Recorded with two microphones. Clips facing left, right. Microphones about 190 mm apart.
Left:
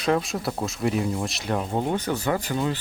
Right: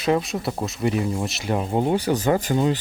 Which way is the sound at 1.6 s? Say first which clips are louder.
Right 6 dB; 15° right (ahead or behind).